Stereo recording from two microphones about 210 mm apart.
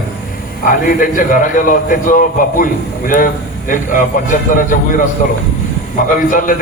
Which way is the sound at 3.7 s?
40° left (ahead or behind).